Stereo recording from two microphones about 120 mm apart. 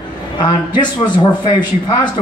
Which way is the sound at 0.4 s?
40° left (ahead or behind).